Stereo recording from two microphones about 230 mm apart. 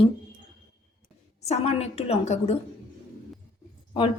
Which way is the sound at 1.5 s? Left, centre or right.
Left.